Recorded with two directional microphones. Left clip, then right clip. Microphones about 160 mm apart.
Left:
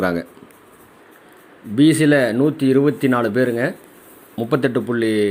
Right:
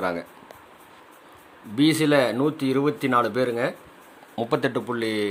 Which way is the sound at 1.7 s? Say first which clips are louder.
Left 5 dB; centre (ahead or behind).